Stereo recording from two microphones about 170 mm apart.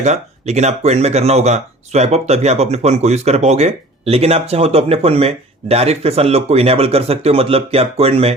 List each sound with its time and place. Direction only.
0.0 s speech: 40° right (ahead or behind)